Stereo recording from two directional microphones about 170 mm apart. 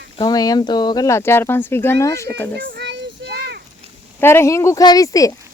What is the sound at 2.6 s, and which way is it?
Child singing, 85° right.